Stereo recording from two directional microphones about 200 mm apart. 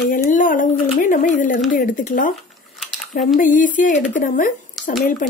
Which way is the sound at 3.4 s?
40° left (ahead or behind).